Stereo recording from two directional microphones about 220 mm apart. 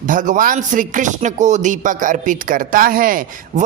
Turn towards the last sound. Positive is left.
turn(degrees=-40)  # may be behind; listen again after turning